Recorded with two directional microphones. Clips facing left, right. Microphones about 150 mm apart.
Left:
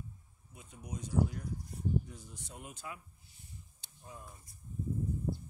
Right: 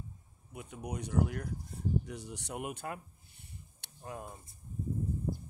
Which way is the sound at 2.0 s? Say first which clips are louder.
Right 8 dB; 75° right (ahead or behind).